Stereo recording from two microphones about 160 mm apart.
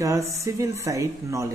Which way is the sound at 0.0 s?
20° right (ahead or behind).